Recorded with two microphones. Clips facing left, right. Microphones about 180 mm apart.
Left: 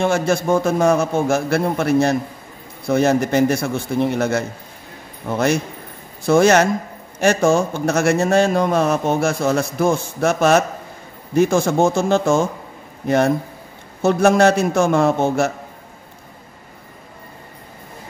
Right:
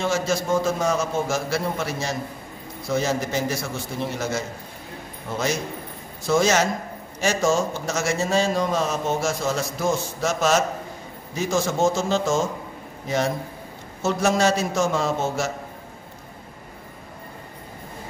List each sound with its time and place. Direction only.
0.0 s a man's voice: 60° left (ahead or behind)